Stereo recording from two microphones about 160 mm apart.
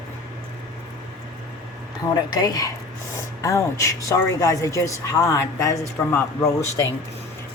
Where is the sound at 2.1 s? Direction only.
25° left (ahead or behind).